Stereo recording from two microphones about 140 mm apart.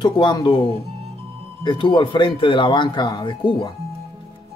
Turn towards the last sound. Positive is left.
turn(degrees=40)  # may be behind; listen again after turning